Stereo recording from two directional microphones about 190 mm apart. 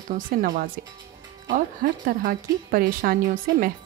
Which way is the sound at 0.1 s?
45° right (ahead or behind).